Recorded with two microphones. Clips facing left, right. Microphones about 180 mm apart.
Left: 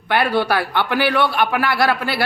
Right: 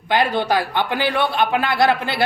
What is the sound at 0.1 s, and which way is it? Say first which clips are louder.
A man's voice: even; 20° right (ahead or behind).